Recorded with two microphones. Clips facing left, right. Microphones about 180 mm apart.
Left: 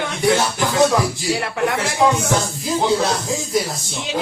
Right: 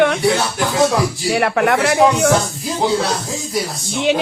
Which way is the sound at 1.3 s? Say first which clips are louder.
Right 6 dB; 65° right (ahead or behind).